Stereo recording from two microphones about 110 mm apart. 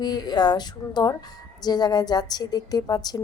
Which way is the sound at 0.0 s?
40° left (ahead or behind).